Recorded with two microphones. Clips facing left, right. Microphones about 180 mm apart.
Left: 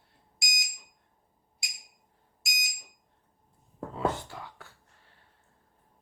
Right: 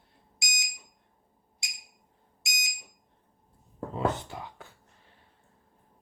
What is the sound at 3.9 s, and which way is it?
Speech, 20° right (ahead or behind).